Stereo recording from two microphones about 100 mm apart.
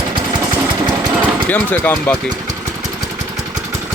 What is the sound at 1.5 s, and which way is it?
Speech, 15° left (ahead or behind).